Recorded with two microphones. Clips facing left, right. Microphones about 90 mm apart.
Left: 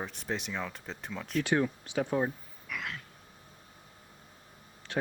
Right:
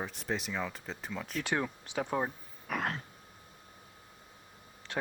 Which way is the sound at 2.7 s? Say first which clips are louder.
Right 5 dB; 45° right (ahead or behind).